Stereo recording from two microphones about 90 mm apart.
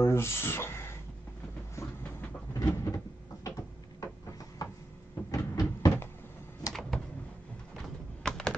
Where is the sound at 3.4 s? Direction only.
40° left (ahead or behind).